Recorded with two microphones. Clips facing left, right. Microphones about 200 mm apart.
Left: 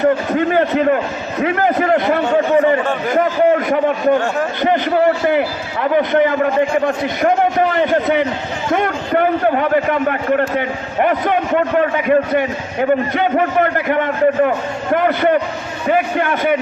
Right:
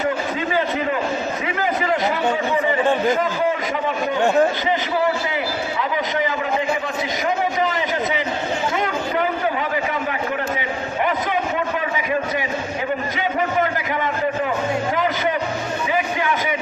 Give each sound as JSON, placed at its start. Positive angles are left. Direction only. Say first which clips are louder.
{"t": 0.3, "sound": "a man's voice", "louder": "left 7 dB", "side_deg": 55}